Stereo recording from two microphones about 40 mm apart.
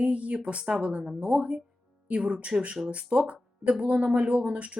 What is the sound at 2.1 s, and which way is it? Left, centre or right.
Speech, right.